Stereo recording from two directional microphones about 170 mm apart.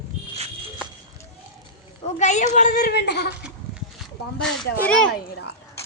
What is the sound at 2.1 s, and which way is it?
A woman's voice, 45° left (ahead or behind).